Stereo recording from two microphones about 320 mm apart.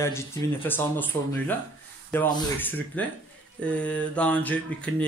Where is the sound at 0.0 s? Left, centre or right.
Centre.